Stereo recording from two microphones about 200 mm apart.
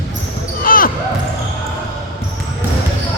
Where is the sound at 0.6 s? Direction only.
45° left (ahead or behind).